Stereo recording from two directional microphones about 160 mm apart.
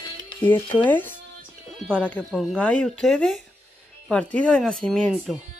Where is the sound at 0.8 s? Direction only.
10° left (ahead or behind); by 5.4 s 5° right (ahead or behind).